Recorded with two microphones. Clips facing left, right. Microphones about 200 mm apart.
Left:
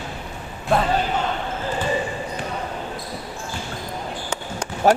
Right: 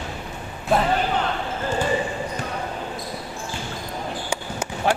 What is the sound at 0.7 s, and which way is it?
Speech, centre (ahead or behind).